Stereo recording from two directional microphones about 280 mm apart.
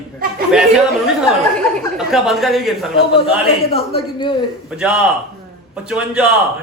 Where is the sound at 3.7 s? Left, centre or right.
Centre.